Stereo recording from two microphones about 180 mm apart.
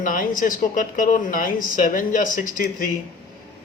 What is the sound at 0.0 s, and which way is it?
Speech, 50° left (ahead or behind).